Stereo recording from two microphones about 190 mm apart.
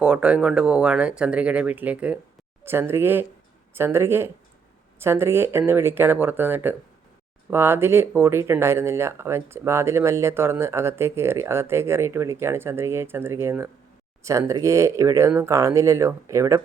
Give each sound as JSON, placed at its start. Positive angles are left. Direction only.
{"t": 0.0, "sound": "speech", "side_deg": -5}